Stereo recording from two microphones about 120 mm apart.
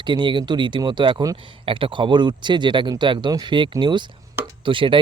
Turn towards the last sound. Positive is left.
turn(degrees=-45)  # may be behind; listen again after turning